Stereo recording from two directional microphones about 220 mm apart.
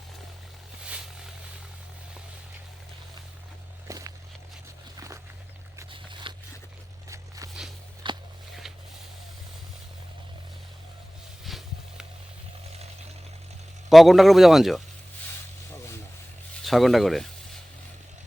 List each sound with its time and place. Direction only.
3.8 s walk: 15° right (ahead or behind)
4.9 s a sound: 15° right (ahead or behind)
7.1 s walk: 15° right (ahead or behind)
11.4 s a sound: centre (ahead or behind)
13.9 s speech: centre (ahead or behind)
16.6 s speech: centre (ahead or behind)